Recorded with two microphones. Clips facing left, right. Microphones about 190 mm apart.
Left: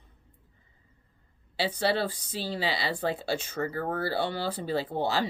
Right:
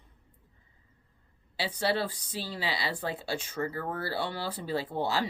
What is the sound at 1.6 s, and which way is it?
Speech, 25° left (ahead or behind).